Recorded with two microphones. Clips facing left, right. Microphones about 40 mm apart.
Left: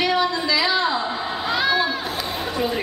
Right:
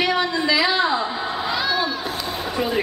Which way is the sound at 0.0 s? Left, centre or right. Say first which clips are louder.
Even; centre.